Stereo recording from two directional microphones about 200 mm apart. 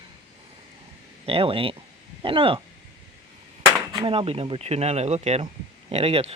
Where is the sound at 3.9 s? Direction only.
25° right (ahead or behind).